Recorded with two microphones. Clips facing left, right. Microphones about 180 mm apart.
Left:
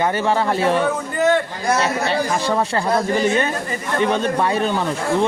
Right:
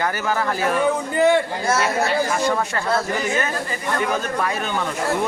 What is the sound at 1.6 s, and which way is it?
Speech, 20° left (ahead or behind).